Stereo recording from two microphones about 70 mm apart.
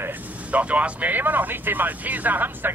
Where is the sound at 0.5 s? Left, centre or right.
Centre.